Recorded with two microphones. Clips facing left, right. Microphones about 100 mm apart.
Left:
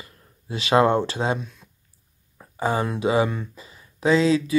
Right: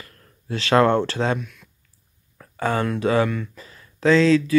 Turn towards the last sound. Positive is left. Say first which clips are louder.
# right 3 dB
turn(degrees=15)  # may be behind; listen again after turning